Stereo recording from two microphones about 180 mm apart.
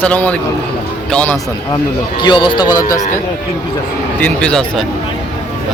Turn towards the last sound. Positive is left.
turn(degrees=5)  # may be behind; listen again after turning